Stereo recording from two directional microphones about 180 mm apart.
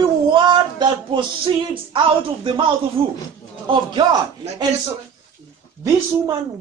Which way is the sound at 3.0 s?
30° right (ahead or behind).